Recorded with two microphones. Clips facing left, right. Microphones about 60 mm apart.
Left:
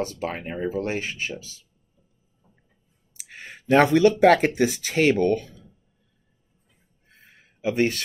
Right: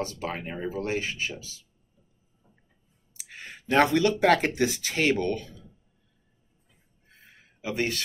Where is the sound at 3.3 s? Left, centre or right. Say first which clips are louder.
Left 7 dB; left.